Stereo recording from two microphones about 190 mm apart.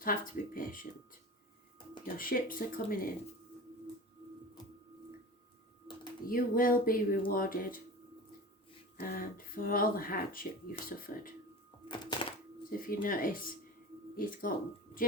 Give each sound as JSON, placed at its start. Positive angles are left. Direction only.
{"t": 0.0, "sound": "speech", "side_deg": 45}
{"t": 2.1, "sound": "speech", "side_deg": 50}
{"t": 6.2, "sound": "speech", "side_deg": 50}
{"t": 9.0, "sound": "speech", "side_deg": 50}
{"t": 11.9, "sound": "thunk", "side_deg": 25}
{"t": 12.9, "sound": "speech", "side_deg": 45}